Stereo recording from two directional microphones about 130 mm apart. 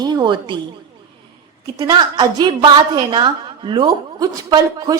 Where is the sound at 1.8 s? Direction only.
35° right (ahead or behind).